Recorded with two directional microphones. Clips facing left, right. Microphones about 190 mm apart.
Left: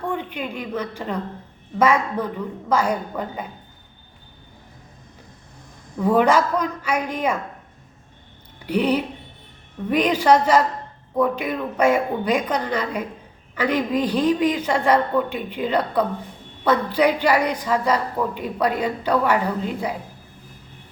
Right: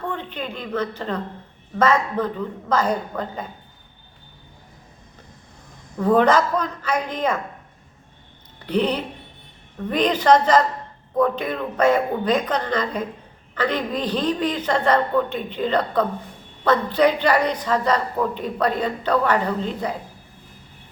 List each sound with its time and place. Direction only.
0.0 s a woman's voice: 10° left (ahead or behind)
6.0 s a woman's voice: 10° left (ahead or behind)
8.5 s a woman's voice: 10° left (ahead or behind)